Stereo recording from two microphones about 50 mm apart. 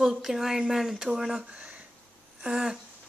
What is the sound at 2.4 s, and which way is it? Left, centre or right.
Speech, centre.